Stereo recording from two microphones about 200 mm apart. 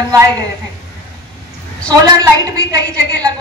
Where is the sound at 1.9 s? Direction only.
20° right (ahead or behind).